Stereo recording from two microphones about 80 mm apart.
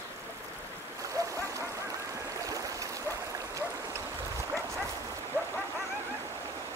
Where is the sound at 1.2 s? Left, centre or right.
Right.